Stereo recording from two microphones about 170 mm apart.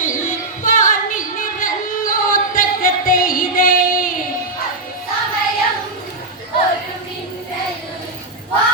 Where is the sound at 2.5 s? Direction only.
55° left (ahead or behind).